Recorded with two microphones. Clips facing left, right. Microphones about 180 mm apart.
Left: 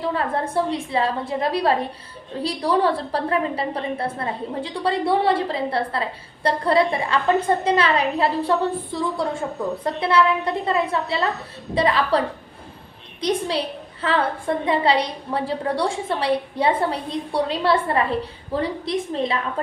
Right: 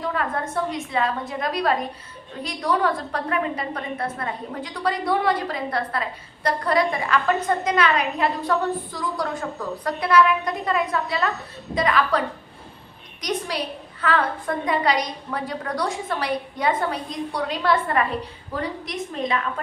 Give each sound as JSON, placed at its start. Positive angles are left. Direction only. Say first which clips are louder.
{"t": 0.0, "sound": "a woman's voice", "louder": "left 3 dB", "side_deg": 30}
{"t": 13.2, "sound": "a woman's voice", "louder": "left 4 dB", "side_deg": 30}